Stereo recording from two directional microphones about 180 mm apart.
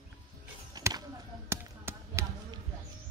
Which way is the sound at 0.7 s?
20° right (ahead or behind).